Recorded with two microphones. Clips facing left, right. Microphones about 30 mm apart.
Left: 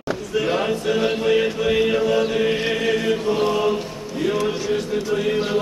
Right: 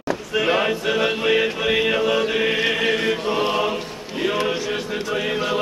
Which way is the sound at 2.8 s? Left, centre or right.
Right.